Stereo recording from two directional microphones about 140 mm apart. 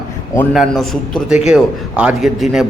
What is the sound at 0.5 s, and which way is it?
A man's voice, centre (ahead or behind).